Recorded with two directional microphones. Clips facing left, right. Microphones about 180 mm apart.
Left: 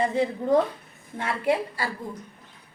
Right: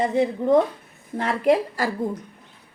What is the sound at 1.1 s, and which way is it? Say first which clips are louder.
Speech: right 5 dB; 35° right (ahead or behind).